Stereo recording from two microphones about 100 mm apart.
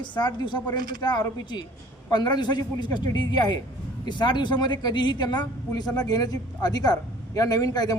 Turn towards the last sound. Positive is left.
turn(degrees=40)  # may be behind; listen again after turning